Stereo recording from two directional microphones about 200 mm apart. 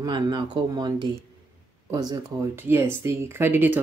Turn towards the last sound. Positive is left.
turn(degrees=-10)  # may be behind; listen again after turning